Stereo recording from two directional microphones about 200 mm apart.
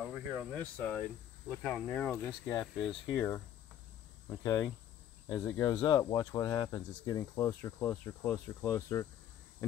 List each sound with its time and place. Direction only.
0.0 s speech: 5° right (ahead or behind)
0.6 s speech: 10° left (ahead or behind)
4.4 s speech: 15° left (ahead or behind)